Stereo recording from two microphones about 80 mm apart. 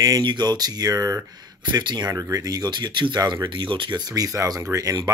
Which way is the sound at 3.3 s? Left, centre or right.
Right.